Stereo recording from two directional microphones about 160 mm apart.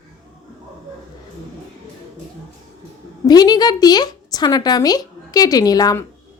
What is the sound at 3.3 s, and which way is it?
A woman's voice, 25° left (ahead or behind).